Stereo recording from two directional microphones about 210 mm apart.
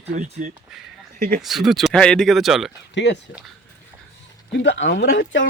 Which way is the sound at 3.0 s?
55° left (ahead or behind).